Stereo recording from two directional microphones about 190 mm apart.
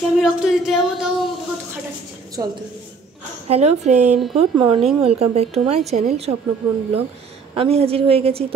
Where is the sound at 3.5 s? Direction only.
35° right (ahead or behind).